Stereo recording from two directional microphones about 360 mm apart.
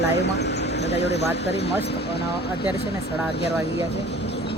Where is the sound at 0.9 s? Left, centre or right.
Left.